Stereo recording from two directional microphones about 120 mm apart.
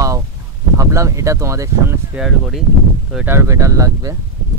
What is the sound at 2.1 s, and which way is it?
Speech, 5° right (ahead or behind).